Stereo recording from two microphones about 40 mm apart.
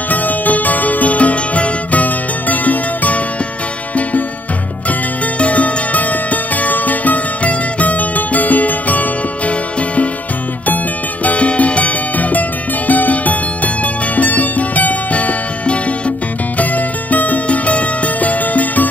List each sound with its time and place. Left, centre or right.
0.1 s music: left
5.4 s music: left
11.2 s music: left